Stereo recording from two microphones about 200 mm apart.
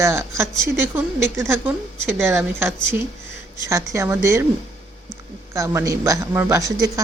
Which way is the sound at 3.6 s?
15° right (ahead or behind).